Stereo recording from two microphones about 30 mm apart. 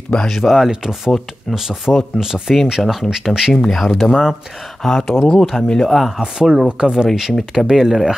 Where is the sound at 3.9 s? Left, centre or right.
Centre.